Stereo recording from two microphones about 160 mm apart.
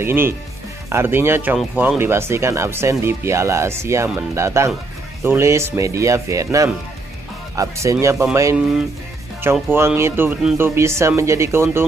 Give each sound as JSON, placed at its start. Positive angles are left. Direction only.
{"t": 0.0, "sound": "speech", "side_deg": -15}